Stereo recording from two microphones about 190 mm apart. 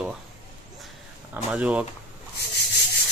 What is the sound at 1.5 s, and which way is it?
Speech, 5° right (ahead or behind).